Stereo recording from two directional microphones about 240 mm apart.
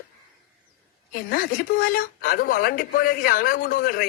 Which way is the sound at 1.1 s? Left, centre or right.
Left.